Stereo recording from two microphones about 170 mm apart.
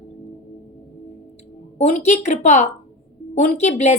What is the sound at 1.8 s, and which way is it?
A woman's voice, 45° left (ahead or behind).